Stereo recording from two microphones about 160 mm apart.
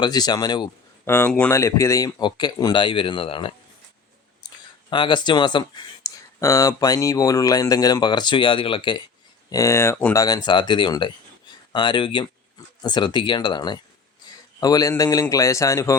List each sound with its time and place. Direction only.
0.0 s speech: 25° left (ahead or behind)
1.0 s speech: 15° left (ahead or behind); by 9.0 s 30° left (ahead or behind)
9.5 s speech: 20° left (ahead or behind)